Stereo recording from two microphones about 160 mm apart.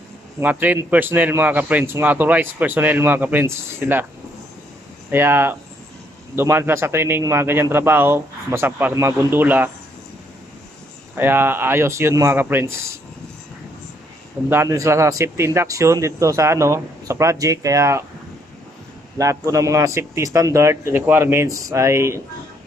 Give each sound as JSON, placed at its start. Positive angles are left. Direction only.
{"t": 0.4, "sound": "a man's voice", "side_deg": -10}
{"t": 5.1, "sound": "a man's voice", "side_deg": -15}
{"t": 11.1, "sound": "a man's voice", "side_deg": -15}
{"t": 14.5, "sound": "a man's voice", "side_deg": -15}
{"t": 19.1, "sound": "a man's voice", "side_deg": -20}